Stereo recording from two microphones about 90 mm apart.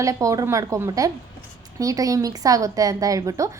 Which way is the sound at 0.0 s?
35° right (ahead or behind).